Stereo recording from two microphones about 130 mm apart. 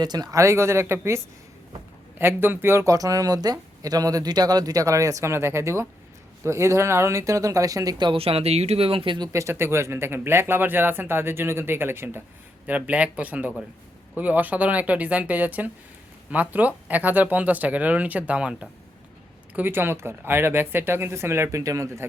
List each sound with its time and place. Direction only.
0.0 s speech: 30° right (ahead or behind)
9.3 s speech: 20° right (ahead or behind)